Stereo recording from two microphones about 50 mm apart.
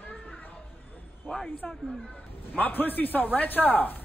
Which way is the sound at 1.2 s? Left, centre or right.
Left.